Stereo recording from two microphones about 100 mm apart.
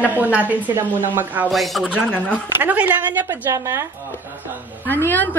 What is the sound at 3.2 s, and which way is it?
Speech, 35° right (ahead or behind).